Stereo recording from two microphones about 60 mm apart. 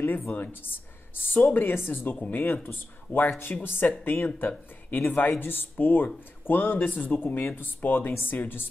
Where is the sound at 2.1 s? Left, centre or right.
Left.